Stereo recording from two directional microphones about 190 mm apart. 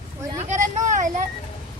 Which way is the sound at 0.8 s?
40° right (ahead or behind).